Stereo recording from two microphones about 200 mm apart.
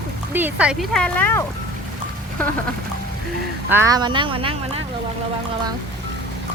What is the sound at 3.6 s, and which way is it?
Speech, 15° right (ahead or behind).